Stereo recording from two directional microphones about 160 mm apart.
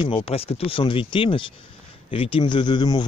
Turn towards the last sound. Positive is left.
turn(degrees=30)  # may be behind; listen again after turning